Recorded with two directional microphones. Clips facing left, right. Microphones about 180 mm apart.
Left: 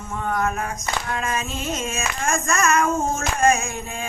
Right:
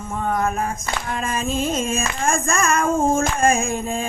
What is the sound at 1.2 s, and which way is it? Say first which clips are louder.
Music: right 4 dB; 30° right (ahead or behind).